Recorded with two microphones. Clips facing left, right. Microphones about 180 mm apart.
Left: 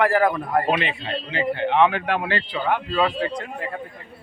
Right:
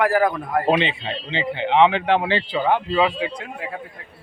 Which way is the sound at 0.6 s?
30° right (ahead or behind).